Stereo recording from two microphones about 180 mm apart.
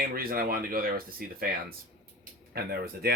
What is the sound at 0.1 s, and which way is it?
Speech, 55° right (ahead or behind).